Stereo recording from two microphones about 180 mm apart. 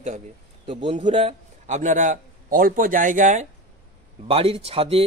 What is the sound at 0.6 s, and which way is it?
A man's voice, 30° right (ahead or behind).